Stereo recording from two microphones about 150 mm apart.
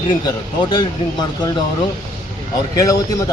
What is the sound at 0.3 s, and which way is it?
Speech, 25° left (ahead or behind).